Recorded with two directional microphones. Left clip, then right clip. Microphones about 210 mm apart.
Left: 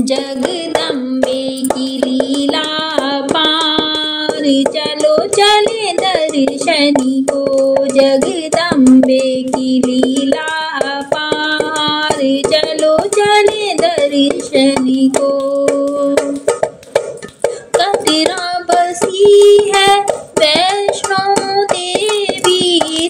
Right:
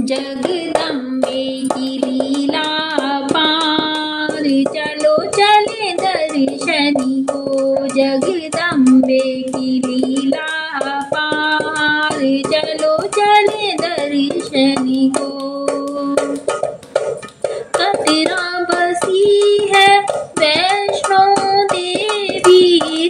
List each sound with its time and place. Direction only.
3.0 s music: 25° left (ahead or behind)
4.5 s child singing: 25° left (ahead or behind)
11.5 s hands: 25° left (ahead or behind)
17.7 s music: 20° left (ahead or behind)
18.8 s child singing: 20° left (ahead or behind)
22.4 s a sound: 25° left (ahead or behind)